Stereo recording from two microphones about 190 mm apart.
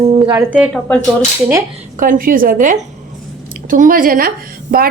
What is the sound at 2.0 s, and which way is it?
Speech, 45° right (ahead or behind).